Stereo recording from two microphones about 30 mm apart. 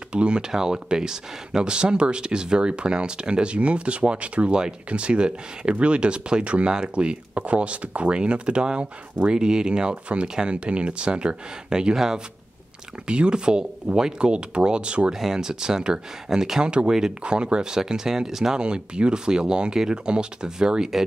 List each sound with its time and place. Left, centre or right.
0.1 s speech: right
0.5 s speech: centre; by 8.2 s right
8.2 s speech: right
10.5 s speech: right
11.7 s speech: right
13.0 s speech: right
15.1 s speech: centre
16.3 s speech: centre
16.6 s speech: right; by 18.6 s centre
18.6 s speech: right